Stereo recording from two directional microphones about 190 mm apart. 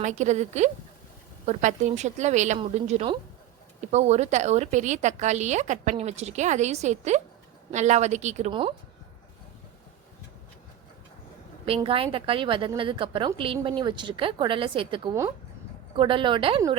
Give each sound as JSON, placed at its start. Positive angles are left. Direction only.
{"t": 0.0, "sound": "a woman's voice", "side_deg": -40}
{"t": 11.6, "sound": "a woman's voice", "side_deg": -30}